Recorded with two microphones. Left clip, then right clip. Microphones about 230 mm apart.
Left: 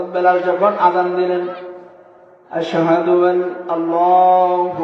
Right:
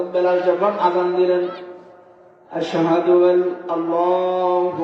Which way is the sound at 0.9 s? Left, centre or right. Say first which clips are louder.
Left 1 dB; centre.